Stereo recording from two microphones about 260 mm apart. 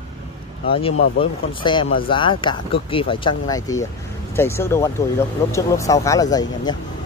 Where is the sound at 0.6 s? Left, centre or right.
Left.